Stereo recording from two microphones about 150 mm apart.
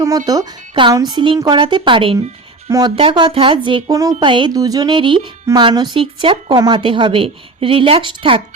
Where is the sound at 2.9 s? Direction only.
35° right (ahead or behind).